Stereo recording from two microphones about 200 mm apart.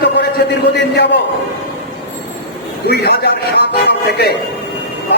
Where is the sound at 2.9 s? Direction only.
55° left (ahead or behind).